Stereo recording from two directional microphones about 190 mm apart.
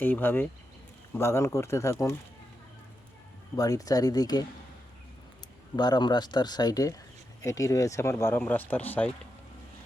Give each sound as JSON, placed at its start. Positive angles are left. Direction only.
{"t": 0.0, "sound": "speech", "side_deg": 10}
{"t": 3.5, "sound": "speech", "side_deg": 20}
{"t": 5.7, "sound": "speech", "side_deg": 20}